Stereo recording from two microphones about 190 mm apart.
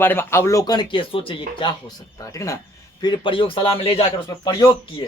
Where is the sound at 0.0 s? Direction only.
10° left (ahead or behind); by 4.0 s 30° left (ahead or behind).